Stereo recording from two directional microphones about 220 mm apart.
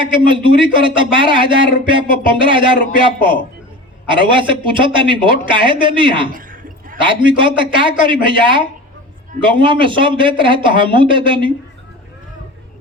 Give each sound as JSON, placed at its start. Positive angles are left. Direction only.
{"t": 0.0, "sound": "speech", "side_deg": -25}
{"t": 6.3, "sound": "a sound", "side_deg": -40}
{"t": 7.0, "sound": "speech", "side_deg": -20}